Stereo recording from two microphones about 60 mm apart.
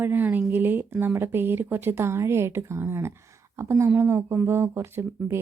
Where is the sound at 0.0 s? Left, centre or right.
Right.